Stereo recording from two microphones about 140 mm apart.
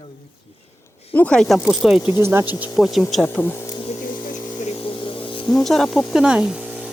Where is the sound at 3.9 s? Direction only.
70° left (ahead or behind); by 5.5 s 35° left (ahead or behind).